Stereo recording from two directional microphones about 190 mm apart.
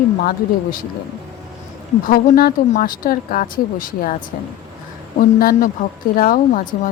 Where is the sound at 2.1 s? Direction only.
50° left (ahead or behind).